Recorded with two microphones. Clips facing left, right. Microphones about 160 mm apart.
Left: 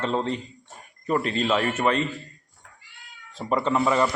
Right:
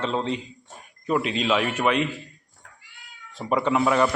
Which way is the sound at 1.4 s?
Centre (ahead or behind).